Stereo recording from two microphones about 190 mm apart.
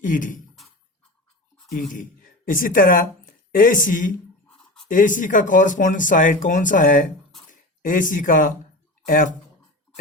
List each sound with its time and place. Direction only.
0.0 s speech: 45° left (ahead or behind)
1.9 s speech: 45° left (ahead or behind)